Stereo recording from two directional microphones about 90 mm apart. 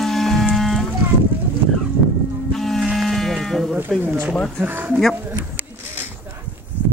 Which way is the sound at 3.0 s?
Centre (ahead or behind).